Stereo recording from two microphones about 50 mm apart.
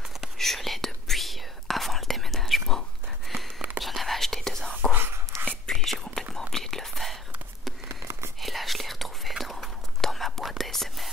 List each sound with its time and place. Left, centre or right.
0.4 s whispering: centre
3.3 s a sound: centre
3.8 s whispering: centre
7.9 s whispering: right
8.4 s whispering: centre